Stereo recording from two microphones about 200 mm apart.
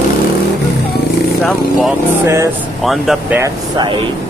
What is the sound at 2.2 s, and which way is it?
Speech, 15° right (ahead or behind).